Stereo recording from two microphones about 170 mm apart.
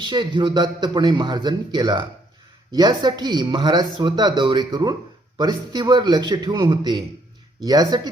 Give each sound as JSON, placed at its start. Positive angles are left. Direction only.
{"t": 0.0, "sound": "speech", "side_deg": -25}